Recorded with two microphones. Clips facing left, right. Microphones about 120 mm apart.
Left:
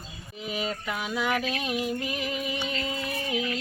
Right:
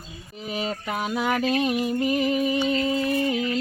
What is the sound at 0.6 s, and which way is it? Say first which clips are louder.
Music: right 4 dB; 40° right (ahead or behind).